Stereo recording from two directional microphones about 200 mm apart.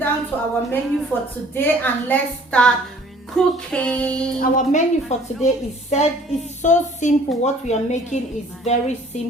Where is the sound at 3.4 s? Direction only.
Centre (ahead or behind).